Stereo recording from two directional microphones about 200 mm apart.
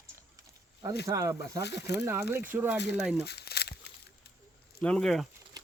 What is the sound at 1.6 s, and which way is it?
Speech, 55° left (ahead or behind).